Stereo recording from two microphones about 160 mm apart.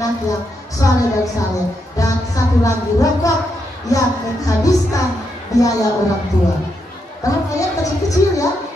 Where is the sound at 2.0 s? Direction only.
20° left (ahead or behind).